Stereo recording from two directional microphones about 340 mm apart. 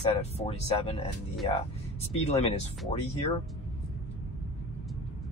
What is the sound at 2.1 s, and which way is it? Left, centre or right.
Speech, centre.